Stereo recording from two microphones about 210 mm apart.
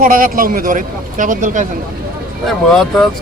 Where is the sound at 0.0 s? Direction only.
40° right (ahead or behind).